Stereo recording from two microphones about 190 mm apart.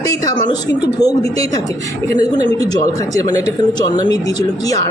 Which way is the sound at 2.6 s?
20° left (ahead or behind).